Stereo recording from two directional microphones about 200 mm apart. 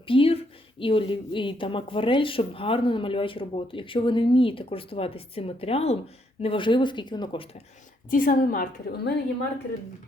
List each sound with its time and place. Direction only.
0.1 s a sound: 25° left (ahead or behind)
0.8 s speech: 25° left (ahead or behind)
8.1 s a woman's voice: 45° left (ahead or behind)